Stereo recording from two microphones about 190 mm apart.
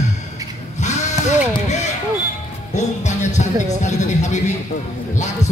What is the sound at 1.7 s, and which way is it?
Basketball bounce, 35° left (ahead or behind).